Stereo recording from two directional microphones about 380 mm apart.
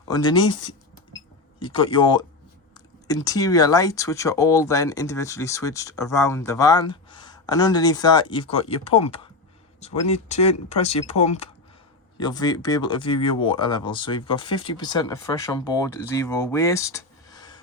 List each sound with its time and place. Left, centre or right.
0.1 s speech: centre